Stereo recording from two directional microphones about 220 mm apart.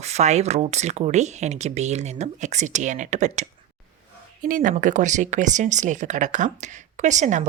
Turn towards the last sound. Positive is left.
turn(degrees=-30)  # may be behind; listen again after turning